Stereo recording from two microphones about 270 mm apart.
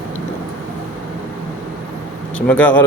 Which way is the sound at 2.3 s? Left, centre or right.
Centre.